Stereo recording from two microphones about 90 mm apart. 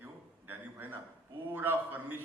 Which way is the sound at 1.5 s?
20° right (ahead or behind).